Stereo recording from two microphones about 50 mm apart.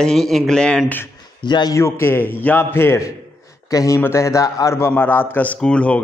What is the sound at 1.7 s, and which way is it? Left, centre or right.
A man's voice, left.